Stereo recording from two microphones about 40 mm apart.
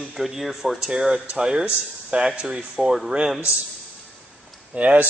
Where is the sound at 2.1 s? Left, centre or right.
Right.